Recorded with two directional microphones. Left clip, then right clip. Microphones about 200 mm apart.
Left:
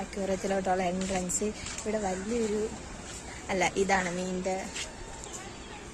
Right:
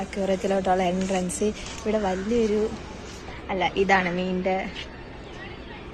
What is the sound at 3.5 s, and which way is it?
Speech, 20° left (ahead or behind).